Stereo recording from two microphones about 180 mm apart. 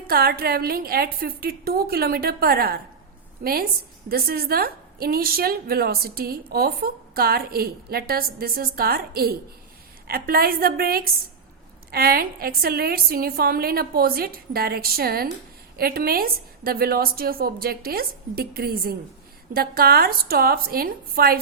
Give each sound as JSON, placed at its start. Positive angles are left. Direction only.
{"t": 0.1, "sound": "a woman's voice", "side_deg": -55}